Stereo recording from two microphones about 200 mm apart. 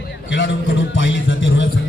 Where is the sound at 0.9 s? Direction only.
65° left (ahead or behind).